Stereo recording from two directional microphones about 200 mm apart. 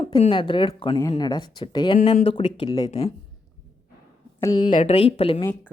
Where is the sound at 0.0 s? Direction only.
25° left (ahead or behind).